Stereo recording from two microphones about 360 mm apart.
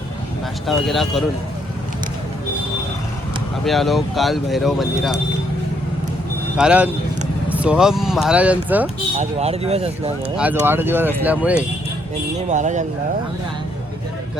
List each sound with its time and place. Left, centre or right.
0.7 s speech: centre
3.7 s speech: centre
6.6 s speech: centre
9.1 s speech: centre
10.3 s speech: centre
12.4 s speech: centre